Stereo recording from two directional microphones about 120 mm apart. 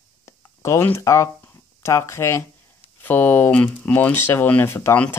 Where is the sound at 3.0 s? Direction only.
15° left (ahead or behind).